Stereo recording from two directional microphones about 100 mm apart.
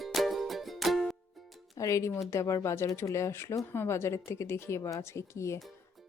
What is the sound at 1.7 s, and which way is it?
A woman's voice, 35° left (ahead or behind).